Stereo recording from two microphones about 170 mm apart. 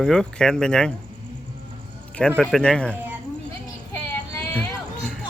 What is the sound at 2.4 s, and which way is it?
Speech, 5° left (ahead or behind).